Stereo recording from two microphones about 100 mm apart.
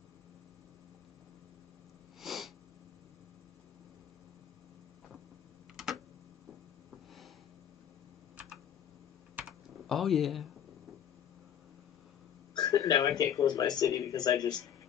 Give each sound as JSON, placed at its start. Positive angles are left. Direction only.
{"t": 2.2, "sound": "sniff", "side_deg": 0}
{"t": 5.8, "sound": "tick-tock", "side_deg": -5}
{"t": 9.5, "sound": "computer keyboard", "side_deg": 0}
{"t": 12.5, "sound": "speech", "side_deg": 40}